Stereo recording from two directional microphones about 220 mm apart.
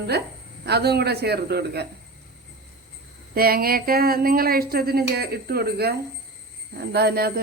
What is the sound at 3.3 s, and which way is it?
Speech, 45° right (ahead or behind).